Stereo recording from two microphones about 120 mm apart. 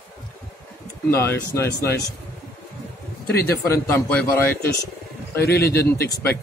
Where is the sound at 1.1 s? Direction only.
20° left (ahead or behind).